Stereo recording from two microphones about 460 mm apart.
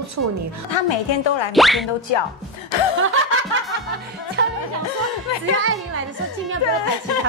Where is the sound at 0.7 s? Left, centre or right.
Left.